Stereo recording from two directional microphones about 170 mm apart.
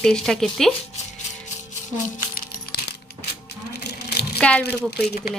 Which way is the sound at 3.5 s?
75° left (ahead or behind).